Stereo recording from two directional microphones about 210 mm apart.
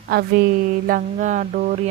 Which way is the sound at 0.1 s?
45° right (ahead or behind).